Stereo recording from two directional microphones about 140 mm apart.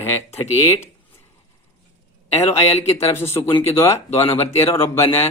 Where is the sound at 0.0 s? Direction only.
15° left (ahead or behind).